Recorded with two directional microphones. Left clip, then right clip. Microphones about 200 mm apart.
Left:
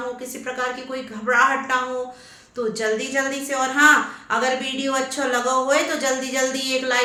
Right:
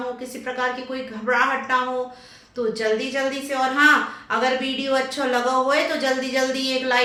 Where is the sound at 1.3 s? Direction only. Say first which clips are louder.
Left 2 dB; 20° left (ahead or behind).